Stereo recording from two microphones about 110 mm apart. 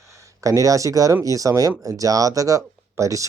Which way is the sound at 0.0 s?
30° right (ahead or behind).